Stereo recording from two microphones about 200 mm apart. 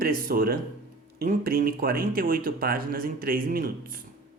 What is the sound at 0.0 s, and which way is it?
Speech, 50° right (ahead or behind).